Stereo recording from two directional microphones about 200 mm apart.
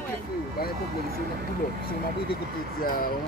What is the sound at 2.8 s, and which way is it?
Speech, 45° left (ahead or behind).